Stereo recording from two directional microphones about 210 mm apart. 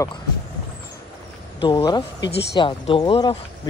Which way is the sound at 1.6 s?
25° left (ahead or behind).